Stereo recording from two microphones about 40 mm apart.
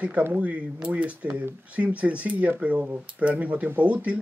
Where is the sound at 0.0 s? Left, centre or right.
Right.